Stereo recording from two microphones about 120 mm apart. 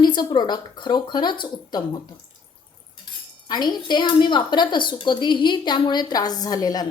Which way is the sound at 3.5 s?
35° left (ahead or behind).